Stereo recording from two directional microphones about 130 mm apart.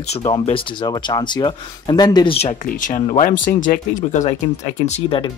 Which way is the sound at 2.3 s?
75° left (ahead or behind).